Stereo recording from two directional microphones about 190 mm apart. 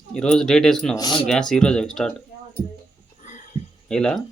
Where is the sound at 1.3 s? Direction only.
5° left (ahead or behind).